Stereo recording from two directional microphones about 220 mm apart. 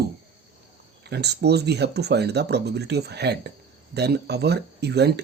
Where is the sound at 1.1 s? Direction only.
50° right (ahead or behind).